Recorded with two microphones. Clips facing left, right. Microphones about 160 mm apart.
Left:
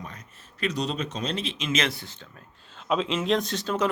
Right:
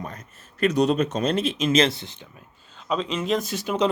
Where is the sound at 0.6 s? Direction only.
50° right (ahead or behind); by 2.2 s 20° right (ahead or behind).